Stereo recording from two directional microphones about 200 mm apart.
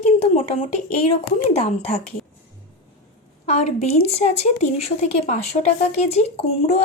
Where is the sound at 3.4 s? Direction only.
30° left (ahead or behind).